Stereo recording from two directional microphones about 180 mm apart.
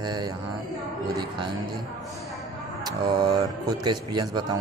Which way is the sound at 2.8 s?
20° right (ahead or behind).